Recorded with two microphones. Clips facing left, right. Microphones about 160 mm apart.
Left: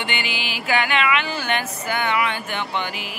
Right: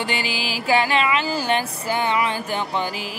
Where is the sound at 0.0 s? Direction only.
35° right (ahead or behind).